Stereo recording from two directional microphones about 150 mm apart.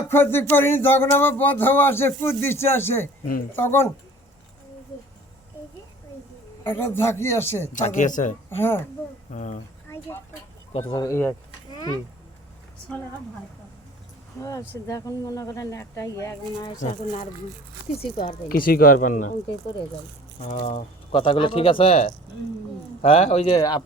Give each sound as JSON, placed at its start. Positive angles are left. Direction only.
{"t": 0.1, "sound": "speech", "side_deg": 15}
{"t": 6.7, "sound": "speech", "side_deg": 15}
{"t": 7.7, "sound": "speech", "side_deg": 55}
{"t": 8.4, "sound": "speech", "side_deg": 15}
{"t": 9.3, "sound": "speech", "side_deg": 55}
{"t": 10.7, "sound": "speech", "side_deg": 40}
{"t": 10.9, "sound": "speech", "side_deg": 20}
{"t": 14.4, "sound": "speech", "side_deg": 20}
{"t": 16.8, "sound": "speech", "side_deg": 55}
{"t": 18.0, "sound": "speech", "side_deg": 40}
{"t": 18.4, "sound": "speech", "side_deg": 75}
{"t": 20.4, "sound": "speech", "side_deg": 50}
{"t": 21.1, "sound": "speech", "side_deg": 35}
{"t": 23.6, "sound": "speech", "side_deg": 25}